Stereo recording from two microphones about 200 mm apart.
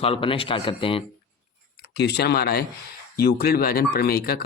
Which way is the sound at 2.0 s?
55° left (ahead or behind).